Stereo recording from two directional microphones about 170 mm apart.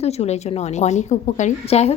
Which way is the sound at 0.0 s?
40° left (ahead or behind).